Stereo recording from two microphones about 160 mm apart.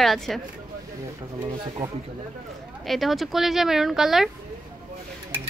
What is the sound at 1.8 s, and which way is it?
Speech, 15° right (ahead or behind).